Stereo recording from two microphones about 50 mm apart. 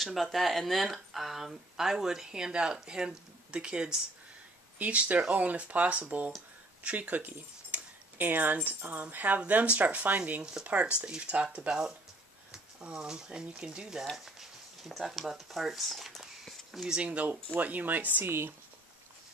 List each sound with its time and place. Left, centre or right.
0.0 s speech: centre
4.7 s speech: right
10.4 s speech: centre
12.9 s speech: centre
14.1 s a sound: centre
16.8 s speech: centre
17.1 s speech: right